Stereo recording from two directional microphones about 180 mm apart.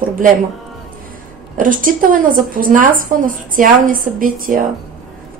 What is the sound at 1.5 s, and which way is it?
A woman's voice, 50° right (ahead or behind).